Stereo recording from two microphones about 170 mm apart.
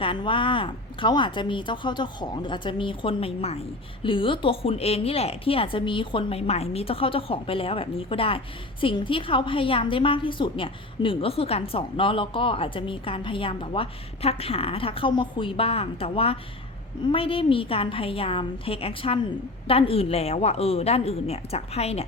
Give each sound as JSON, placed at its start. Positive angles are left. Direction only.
{"t": 0.0, "sound": "a woman's voice", "side_deg": 30}